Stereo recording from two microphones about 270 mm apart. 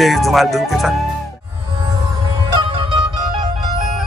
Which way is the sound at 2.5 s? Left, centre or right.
Centre.